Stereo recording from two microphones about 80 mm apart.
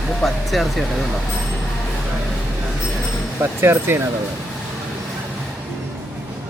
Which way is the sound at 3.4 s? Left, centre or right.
Right.